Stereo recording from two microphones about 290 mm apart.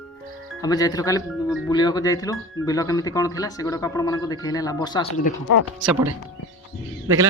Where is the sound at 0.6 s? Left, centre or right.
Centre.